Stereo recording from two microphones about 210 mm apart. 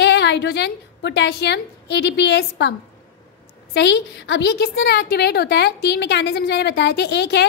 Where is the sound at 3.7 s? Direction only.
55° left (ahead or behind).